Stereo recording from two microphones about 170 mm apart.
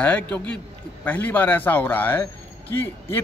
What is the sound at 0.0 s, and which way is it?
Speech, 10° left (ahead or behind).